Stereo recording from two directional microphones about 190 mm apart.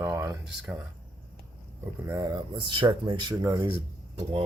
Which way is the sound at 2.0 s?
20° right (ahead or behind).